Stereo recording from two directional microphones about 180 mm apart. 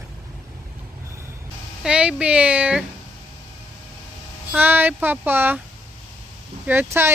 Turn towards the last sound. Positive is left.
turn(degrees=-15)  # may be behind; listen again after turning